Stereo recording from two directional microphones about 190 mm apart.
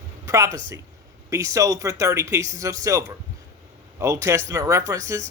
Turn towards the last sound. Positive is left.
turn(degrees=-15)  # may be behind; listen again after turning